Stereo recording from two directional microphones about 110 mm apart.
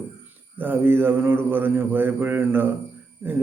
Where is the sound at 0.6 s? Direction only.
20° right (ahead or behind).